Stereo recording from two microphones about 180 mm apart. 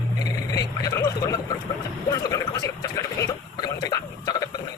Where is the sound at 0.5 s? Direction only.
20° left (ahead or behind).